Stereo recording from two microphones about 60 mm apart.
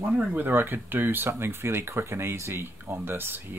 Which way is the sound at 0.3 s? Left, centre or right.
Right.